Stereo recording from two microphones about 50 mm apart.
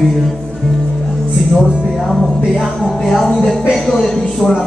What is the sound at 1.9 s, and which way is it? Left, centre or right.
Music, centre.